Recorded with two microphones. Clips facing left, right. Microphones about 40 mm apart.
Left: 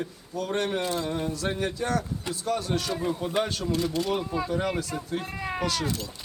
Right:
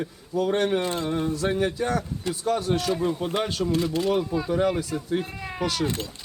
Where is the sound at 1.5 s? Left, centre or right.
Right.